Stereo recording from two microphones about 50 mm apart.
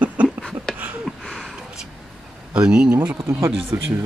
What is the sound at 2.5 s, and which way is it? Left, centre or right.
Speech, right.